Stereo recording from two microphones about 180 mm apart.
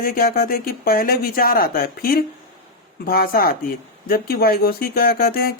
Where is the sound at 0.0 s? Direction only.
55° left (ahead or behind).